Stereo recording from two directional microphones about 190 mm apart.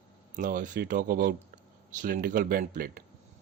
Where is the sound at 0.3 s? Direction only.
40° right (ahead or behind).